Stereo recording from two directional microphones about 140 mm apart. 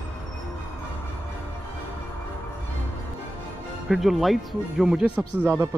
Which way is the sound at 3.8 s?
Centre (ahead or behind).